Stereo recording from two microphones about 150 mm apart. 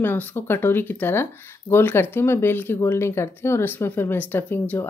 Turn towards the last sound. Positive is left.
turn(degrees=15)  # may be behind; listen again after turning